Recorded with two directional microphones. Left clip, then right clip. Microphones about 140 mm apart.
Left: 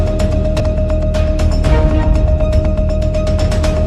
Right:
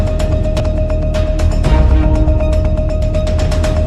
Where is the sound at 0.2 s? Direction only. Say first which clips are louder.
Left 1 dB; centre (ahead or behind).